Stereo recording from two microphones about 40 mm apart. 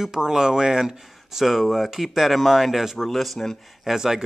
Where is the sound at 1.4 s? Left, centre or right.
Centre.